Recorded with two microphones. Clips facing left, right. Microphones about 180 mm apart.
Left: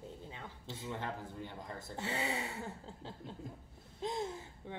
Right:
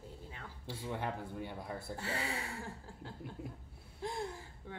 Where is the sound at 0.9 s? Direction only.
15° right (ahead or behind).